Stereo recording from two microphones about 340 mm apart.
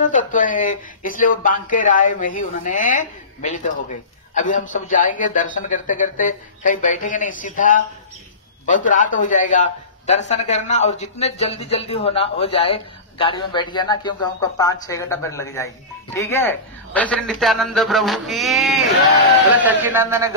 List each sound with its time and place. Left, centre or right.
0.1 s a man's voice: left; by 20.2 s centre